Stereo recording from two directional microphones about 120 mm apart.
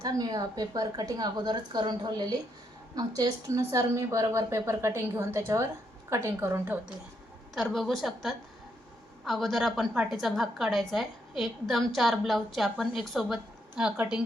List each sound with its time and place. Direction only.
0.0 s a woman's voice: 35° right (ahead or behind)
7.5 s a woman's voice: centre (ahead or behind)